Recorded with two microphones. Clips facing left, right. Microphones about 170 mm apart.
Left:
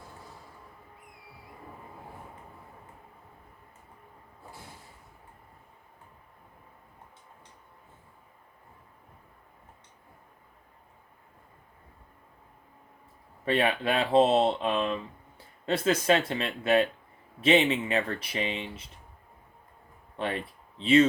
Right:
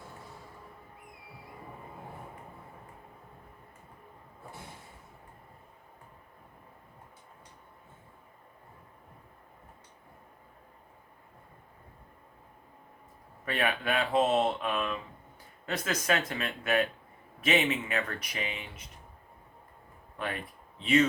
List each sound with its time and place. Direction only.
13.4 s speech: 30° left (ahead or behind)
20.1 s speech: 30° left (ahead or behind)